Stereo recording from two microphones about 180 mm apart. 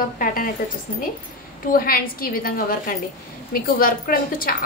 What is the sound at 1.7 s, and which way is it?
A woman's voice, 55° left (ahead or behind).